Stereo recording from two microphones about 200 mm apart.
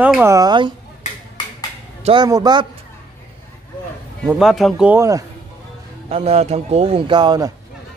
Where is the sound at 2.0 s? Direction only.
20° right (ahead or behind).